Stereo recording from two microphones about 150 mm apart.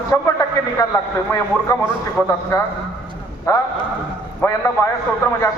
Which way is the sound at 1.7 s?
25° left (ahead or behind).